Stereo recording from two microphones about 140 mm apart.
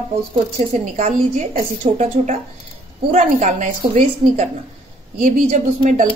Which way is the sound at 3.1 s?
60° right (ahead or behind).